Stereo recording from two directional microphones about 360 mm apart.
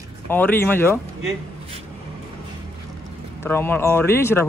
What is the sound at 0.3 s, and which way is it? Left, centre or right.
Speech, centre.